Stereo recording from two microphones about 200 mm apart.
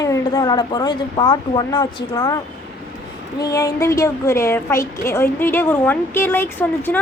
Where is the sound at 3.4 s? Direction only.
15° left (ahead or behind).